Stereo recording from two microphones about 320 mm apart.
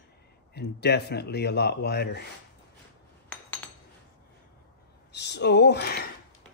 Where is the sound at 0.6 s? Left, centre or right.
Left.